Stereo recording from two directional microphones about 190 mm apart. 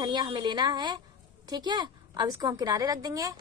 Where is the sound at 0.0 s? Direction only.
25° right (ahead or behind).